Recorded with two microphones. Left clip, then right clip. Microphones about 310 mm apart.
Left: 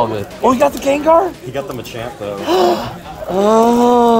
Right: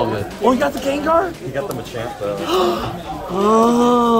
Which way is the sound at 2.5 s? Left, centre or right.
Left.